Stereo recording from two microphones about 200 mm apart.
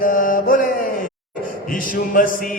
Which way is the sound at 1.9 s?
45° left (ahead or behind).